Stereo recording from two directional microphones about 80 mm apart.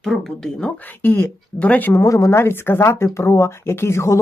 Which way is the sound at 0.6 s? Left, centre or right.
Left.